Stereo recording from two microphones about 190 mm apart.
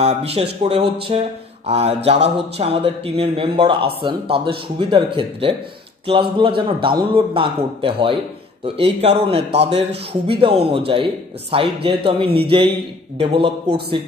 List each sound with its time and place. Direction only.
0.0 s a man's voice: 30° right (ahead or behind)